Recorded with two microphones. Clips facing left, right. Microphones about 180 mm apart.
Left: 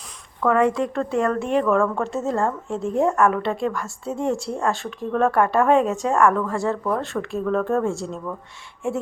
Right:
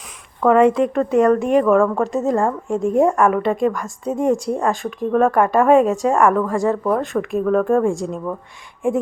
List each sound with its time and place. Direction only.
0.4 s a woman's voice: 20° right (ahead or behind)